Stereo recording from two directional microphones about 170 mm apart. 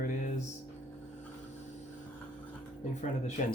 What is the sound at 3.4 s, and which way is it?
Speech, 45° left (ahead or behind).